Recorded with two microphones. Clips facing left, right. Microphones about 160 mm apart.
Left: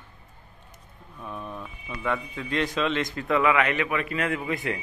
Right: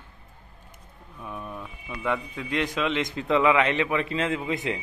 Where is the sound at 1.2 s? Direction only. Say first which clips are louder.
Even; 10° right (ahead or behind).